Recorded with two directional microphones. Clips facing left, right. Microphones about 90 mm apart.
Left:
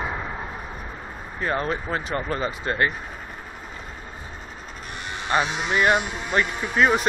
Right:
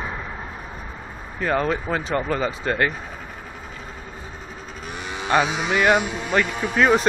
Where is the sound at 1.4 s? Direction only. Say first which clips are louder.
Right 3 dB; 55° right (ahead or behind).